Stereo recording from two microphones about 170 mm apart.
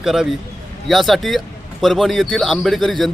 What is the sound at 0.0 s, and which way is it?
A man's voice, centre (ahead or behind).